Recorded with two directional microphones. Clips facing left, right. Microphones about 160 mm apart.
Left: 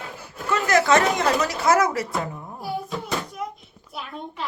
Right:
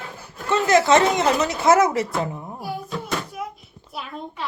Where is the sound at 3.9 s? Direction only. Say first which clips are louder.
Right 1 dB; centre (ahead or behind).